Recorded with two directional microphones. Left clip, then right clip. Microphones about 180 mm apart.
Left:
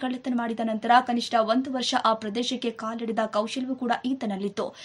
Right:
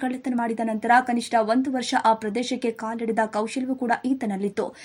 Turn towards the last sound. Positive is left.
turn(degrees=-15)  # may be behind; listen again after turning